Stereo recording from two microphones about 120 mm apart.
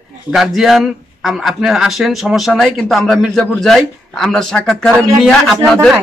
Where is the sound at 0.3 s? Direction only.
Centre (ahead or behind).